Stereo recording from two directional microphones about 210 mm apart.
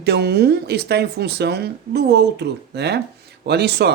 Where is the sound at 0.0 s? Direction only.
50° right (ahead or behind).